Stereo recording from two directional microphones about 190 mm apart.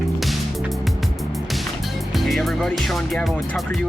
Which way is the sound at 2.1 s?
Centre (ahead or behind).